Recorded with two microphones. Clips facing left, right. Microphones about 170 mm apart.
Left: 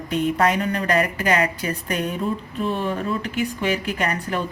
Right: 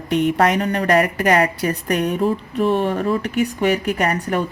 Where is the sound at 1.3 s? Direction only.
40° right (ahead or behind).